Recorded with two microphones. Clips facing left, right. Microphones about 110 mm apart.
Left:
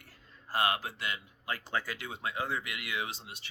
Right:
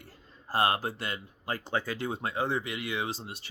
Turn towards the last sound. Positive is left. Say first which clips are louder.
# right 4 dB
turn(degrees=-35)  # may be behind; listen again after turning